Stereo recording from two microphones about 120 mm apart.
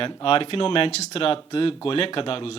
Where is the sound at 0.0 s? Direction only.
50° left (ahead or behind).